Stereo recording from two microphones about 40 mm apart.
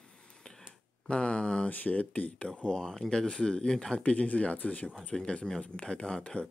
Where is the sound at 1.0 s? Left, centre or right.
Left.